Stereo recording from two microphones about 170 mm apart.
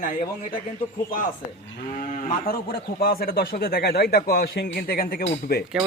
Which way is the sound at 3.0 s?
60° left (ahead or behind).